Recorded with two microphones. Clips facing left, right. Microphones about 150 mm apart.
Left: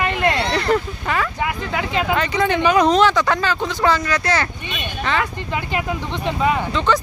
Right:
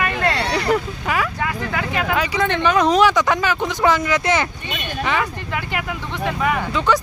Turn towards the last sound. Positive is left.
turn(degrees=-10)  # may be behind; listen again after turning